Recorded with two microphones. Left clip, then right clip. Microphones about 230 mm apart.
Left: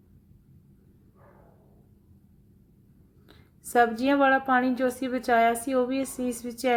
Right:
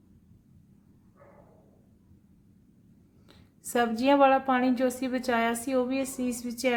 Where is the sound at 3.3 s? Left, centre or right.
Centre.